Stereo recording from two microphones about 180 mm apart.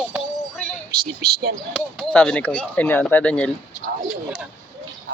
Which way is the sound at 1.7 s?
5° left (ahead or behind).